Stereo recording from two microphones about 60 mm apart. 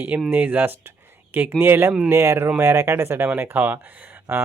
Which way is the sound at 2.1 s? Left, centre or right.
Right.